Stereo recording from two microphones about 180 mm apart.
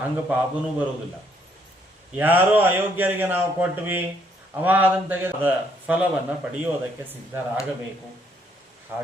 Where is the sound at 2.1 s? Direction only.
10° right (ahead or behind).